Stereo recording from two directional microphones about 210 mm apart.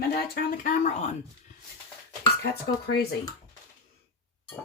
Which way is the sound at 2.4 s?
50° left (ahead or behind).